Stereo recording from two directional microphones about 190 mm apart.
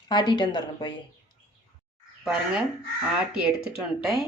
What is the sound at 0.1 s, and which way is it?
Speech, 25° left (ahead or behind).